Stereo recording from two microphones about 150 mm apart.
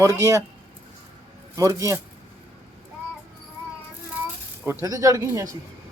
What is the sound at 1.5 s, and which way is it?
Speech, 20° right (ahead or behind).